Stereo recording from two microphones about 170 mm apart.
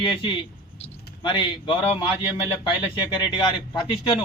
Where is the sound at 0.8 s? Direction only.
25° left (ahead or behind).